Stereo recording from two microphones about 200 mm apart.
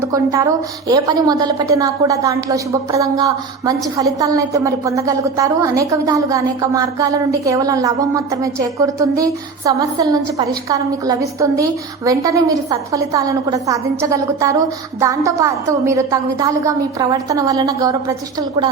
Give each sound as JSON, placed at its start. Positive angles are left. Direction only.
{"t": 0.1, "sound": "a woman's voice", "side_deg": -15}